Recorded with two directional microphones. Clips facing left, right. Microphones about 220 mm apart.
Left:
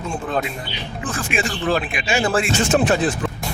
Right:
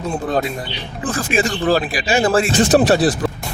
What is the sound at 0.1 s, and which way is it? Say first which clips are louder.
Speech: right 4 dB; 35° right (ahead or behind).